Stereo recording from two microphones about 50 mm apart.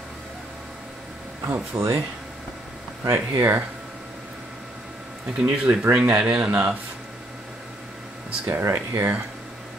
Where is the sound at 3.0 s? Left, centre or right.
Right.